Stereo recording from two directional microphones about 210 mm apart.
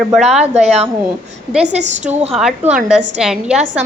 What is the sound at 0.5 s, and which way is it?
A woman's voice, 30° right (ahead or behind).